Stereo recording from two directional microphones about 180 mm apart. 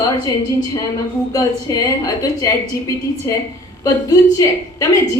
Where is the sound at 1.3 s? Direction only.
20° left (ahead or behind).